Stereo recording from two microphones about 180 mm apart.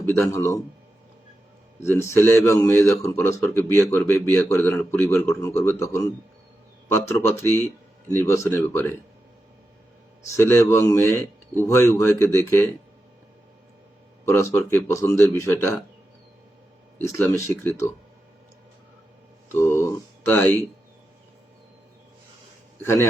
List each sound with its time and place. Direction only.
0.0 s a man's voice: 15° left (ahead or behind)
1.8 s a man's voice: 15° left (ahead or behind)
10.2 s a man's voice: 15° left (ahead or behind)
14.3 s a man's voice: 15° left (ahead or behind)
17.0 s a man's voice: 15° left (ahead or behind)
19.5 s a sound: 15° left (ahead or behind)
22.8 s a man's voice: 15° left (ahead or behind)